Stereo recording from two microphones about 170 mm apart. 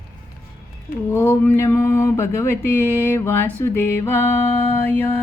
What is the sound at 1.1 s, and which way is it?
Music, 15° left (ahead or behind).